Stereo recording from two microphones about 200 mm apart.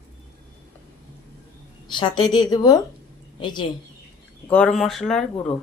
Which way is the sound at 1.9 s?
25° left (ahead or behind).